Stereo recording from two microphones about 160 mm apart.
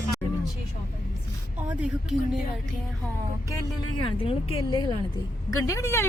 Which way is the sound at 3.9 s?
35° left (ahead or behind).